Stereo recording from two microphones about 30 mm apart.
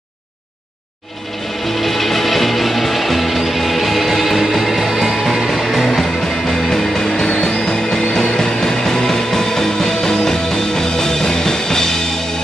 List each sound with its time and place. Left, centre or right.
1.8 s music: centre